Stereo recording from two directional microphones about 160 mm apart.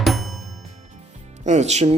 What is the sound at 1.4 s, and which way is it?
Speech, 45° right (ahead or behind).